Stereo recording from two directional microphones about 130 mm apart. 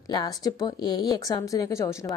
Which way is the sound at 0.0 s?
30° left (ahead or behind).